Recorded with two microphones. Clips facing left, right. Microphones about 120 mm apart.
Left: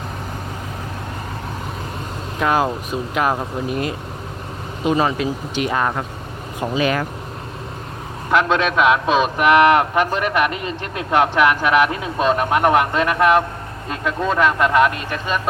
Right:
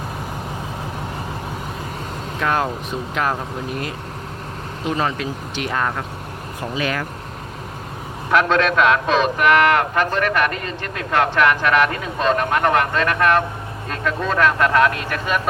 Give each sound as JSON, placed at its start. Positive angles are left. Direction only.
{"t": 2.4, "sound": "a man's voice", "side_deg": 10}
{"t": 4.9, "sound": "a man's voice", "side_deg": 15}
{"t": 8.3, "sound": "a man's voice", "side_deg": 5}